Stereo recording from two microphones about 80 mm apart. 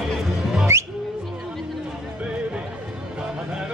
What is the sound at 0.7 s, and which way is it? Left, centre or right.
Music, right.